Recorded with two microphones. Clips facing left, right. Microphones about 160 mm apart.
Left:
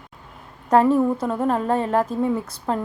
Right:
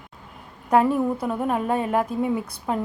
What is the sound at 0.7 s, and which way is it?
Speech, 10° right (ahead or behind).